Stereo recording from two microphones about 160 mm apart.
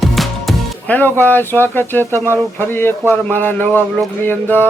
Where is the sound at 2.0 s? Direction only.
15° right (ahead or behind).